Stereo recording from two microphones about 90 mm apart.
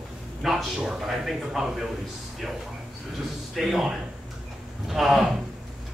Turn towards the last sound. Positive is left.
turn(degrees=-5)  # may be behind; listen again after turning